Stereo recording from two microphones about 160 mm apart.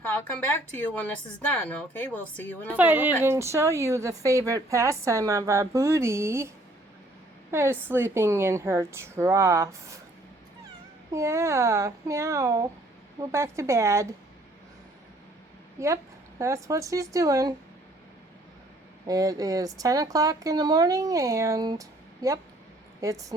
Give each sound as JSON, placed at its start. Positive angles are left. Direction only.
{"t": 0.0, "sound": "speech", "side_deg": 15}
{"t": 1.6, "sound": "a woman's voice", "side_deg": 10}
{"t": 2.7, "sound": "a woman's voice", "side_deg": -10}
{"t": 7.5, "sound": "a woman's voice", "side_deg": -15}
{"t": 11.1, "sound": "a woman's voice", "side_deg": -20}
{"t": 15.8, "sound": "a woman's voice", "side_deg": -20}
{"t": 19.0, "sound": "a woman's voice", "side_deg": -20}